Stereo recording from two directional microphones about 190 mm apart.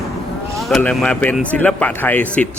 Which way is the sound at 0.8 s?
5° left (ahead or behind).